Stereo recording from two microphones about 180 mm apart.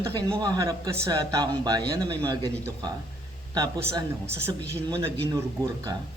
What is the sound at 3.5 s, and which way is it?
Speech, 20° right (ahead or behind).